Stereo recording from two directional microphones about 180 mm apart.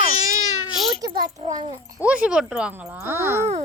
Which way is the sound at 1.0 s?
20° right (ahead or behind).